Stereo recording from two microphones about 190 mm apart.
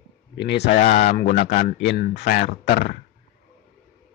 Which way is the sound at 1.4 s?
45° left (ahead or behind).